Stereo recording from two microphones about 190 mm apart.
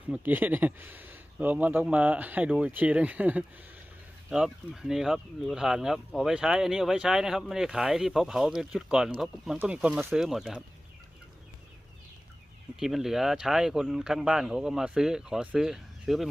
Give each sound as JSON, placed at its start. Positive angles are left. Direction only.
{"t": 0.1, "sound": "speech", "side_deg": -10}
{"t": 12.8, "sound": "speech", "side_deg": 0}